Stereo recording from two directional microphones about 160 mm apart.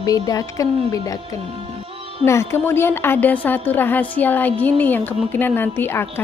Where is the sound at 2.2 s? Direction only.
15° left (ahead or behind).